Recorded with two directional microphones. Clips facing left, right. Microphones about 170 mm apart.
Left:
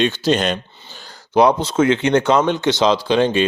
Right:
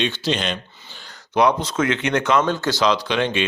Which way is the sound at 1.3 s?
30° left (ahead or behind).